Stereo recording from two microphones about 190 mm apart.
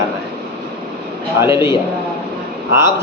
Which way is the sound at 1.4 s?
25° left (ahead or behind).